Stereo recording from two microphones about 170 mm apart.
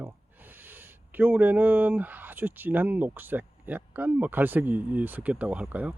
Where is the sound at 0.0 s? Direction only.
10° right (ahead or behind).